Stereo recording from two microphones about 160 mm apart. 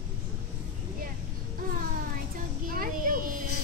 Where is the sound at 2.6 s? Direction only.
60° right (ahead or behind).